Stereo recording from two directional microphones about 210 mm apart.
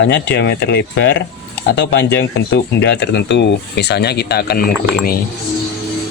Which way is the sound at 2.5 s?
55° left (ahead or behind).